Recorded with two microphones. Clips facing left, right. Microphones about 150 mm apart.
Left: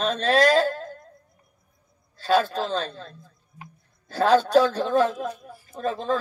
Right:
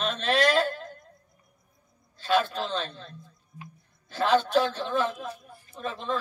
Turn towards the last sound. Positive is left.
turn(degrees=40)  # may be behind; listen again after turning